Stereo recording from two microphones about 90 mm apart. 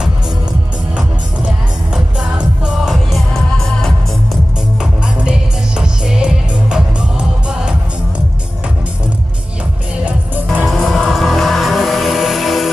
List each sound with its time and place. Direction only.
2.0 s music: 10° right (ahead or behind)
5.0 s music: 10° right (ahead or behind)
10.0 s music: 20° right (ahead or behind)
10.6 s music: centre (ahead or behind)